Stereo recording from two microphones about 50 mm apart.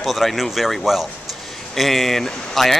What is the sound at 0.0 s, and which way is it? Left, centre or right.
Speech, centre.